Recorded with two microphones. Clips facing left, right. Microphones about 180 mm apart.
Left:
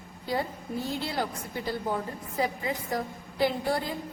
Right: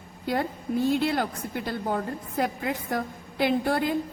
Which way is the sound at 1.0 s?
60° right (ahead or behind).